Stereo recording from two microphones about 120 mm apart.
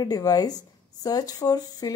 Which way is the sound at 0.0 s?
30° left (ahead or behind).